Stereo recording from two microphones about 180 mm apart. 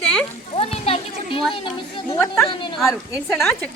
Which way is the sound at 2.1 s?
15° left (ahead or behind).